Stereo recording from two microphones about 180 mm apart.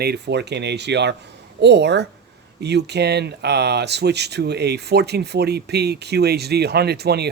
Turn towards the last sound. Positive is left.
turn(degrees=-65)  # may be behind; listen again after turning